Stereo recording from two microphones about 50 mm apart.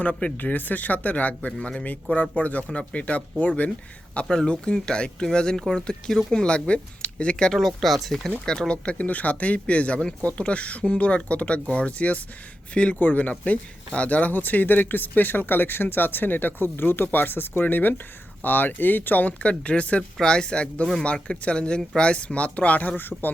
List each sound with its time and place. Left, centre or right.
0.0 s speech: left
0.3 s speech: left
4.3 s speech: centre
7.6 s speech: centre
8.4 s speech: centre
13.0 s speech: left
19.4 s speech: left